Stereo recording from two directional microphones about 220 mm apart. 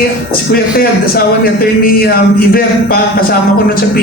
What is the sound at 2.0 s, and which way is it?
Speech, 45° left (ahead or behind).